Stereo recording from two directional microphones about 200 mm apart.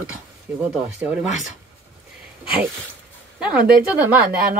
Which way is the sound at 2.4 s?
5° right (ahead or behind).